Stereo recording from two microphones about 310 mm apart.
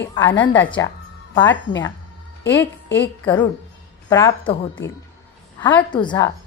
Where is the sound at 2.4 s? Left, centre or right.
Left.